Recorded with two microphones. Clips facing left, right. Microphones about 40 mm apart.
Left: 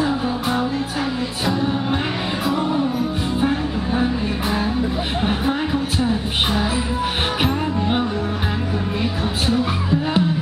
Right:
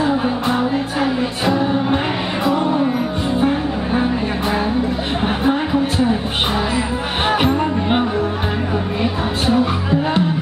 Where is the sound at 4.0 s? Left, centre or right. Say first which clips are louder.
Right 2 dB; centre.